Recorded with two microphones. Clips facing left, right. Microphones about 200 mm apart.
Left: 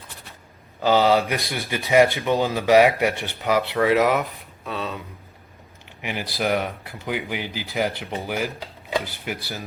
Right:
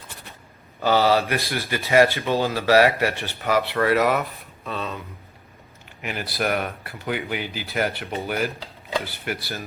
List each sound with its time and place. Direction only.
0.8 s speech: 15° left (ahead or behind)
6.0 s speech: 15° left (ahead or behind)